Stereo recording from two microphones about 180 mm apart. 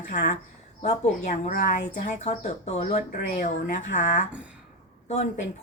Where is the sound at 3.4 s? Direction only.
45° left (ahead or behind).